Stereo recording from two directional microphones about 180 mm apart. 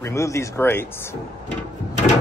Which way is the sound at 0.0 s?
15° left (ahead or behind).